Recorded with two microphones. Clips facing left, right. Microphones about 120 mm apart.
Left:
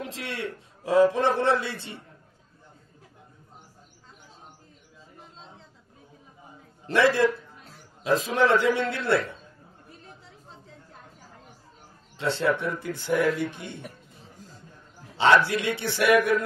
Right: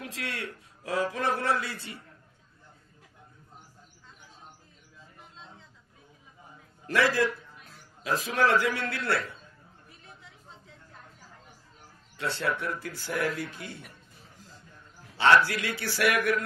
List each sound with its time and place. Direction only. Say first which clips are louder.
0.0 s a man's voice: left 4 dB; 25° left (ahead or behind)
6.9 s a man's voice: left 4 dB; 25° left (ahead or behind)
9.8 s chatter: left 4 dB; 35° left (ahead or behind)
12.2 s a man's voice: left 6 dB; 25° left (ahead or behind)
15.1 s a man's voice: left 2 dB; 20° left (ahead or behind)